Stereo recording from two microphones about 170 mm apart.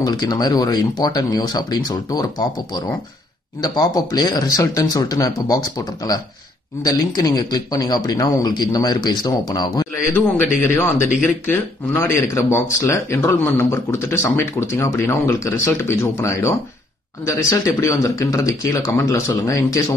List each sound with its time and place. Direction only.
0.0 s speech: 25° left (ahead or behind)